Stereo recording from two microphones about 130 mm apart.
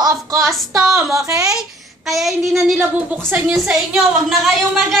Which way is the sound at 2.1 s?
Centre (ahead or behind).